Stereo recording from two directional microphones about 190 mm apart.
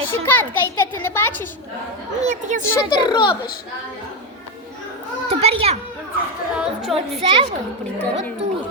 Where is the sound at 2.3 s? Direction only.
40° right (ahead or behind).